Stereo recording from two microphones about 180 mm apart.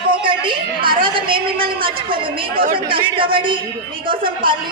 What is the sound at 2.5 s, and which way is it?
Speech, 55° right (ahead or behind).